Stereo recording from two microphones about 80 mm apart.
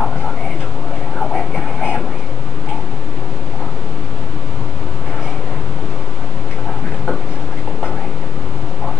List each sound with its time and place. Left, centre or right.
1.3 s vehicle: centre